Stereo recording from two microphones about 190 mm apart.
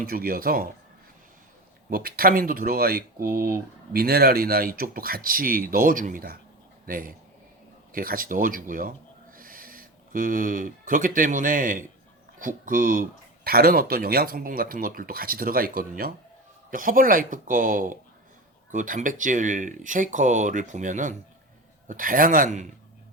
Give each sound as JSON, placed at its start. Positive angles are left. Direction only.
{"t": 0.0, "sound": "speech", "side_deg": -50}
{"t": 1.9, "sound": "speech", "side_deg": -50}